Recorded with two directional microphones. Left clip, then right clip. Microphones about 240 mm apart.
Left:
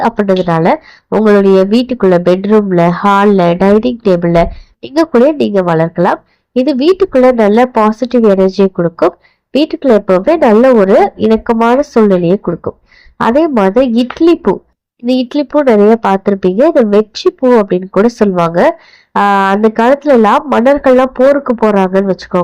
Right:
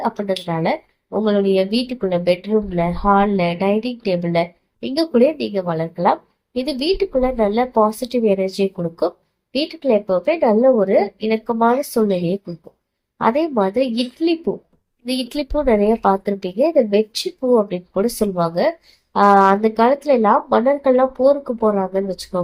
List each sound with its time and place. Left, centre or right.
0.0 s speech: left